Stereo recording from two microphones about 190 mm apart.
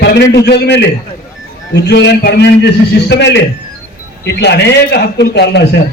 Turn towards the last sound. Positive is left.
turn(degrees=60)  # may be behind; listen again after turning